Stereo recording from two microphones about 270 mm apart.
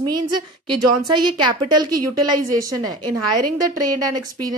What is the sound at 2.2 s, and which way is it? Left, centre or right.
Speech, centre.